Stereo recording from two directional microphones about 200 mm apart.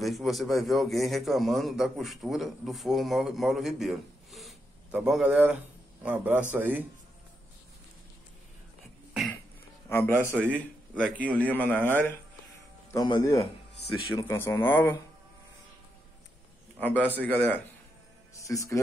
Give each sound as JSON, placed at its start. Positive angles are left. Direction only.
{"t": 0.0, "sound": "a man's voice", "side_deg": 0}
{"t": 9.8, "sound": "a man's voice", "side_deg": 10}
{"t": 16.8, "sound": "speech", "side_deg": 10}